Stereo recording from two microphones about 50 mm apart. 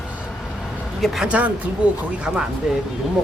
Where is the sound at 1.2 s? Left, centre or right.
Right.